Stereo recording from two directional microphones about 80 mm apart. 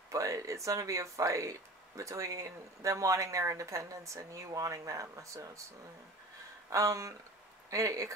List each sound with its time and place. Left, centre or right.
0.1 s speech: right
6.7 s speech: right